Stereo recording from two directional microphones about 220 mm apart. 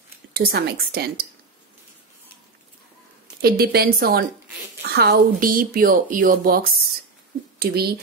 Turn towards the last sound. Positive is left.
turn(degrees=-45)  # may be behind; listen again after turning